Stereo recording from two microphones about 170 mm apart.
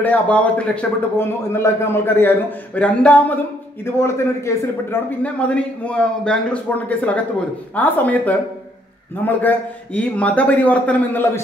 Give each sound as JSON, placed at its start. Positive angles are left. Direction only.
{"t": 0.0, "sound": "a man's voice", "side_deg": 10}